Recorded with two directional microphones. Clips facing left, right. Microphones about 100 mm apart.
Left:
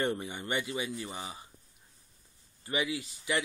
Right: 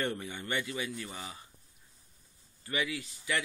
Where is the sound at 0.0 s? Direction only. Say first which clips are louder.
Left 3 dB; 20° left (ahead or behind).